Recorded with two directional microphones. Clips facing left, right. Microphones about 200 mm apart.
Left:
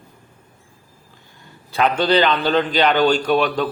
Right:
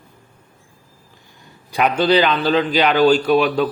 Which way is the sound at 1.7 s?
10° right (ahead or behind).